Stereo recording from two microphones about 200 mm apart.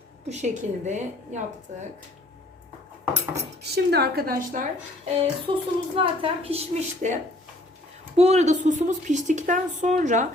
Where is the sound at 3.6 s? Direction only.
55° right (ahead or behind).